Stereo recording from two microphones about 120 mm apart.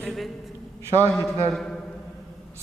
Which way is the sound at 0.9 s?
25° right (ahead or behind).